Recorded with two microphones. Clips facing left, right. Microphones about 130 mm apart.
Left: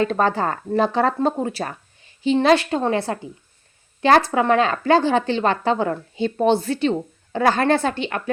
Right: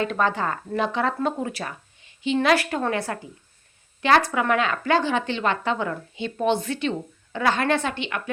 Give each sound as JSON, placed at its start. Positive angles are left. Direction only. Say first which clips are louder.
{"t": 0.0, "sound": "speech", "louder": "left 4 dB", "side_deg": 35}